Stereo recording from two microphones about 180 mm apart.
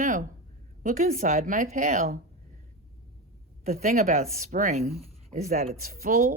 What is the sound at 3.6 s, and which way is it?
A woman's voice, 40° right (ahead or behind).